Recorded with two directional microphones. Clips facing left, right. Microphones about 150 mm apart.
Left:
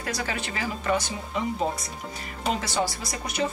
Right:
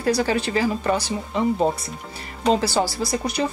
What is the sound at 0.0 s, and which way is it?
Speech, 35° right (ahead or behind).